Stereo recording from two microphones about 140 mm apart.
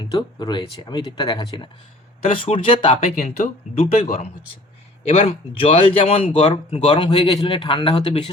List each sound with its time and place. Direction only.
0.0 s speech: 30° left (ahead or behind)
3.2 s speech: 55° left (ahead or behind)
6.9 s speech: 35° left (ahead or behind)